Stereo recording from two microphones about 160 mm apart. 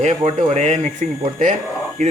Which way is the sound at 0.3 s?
45° right (ahead or behind).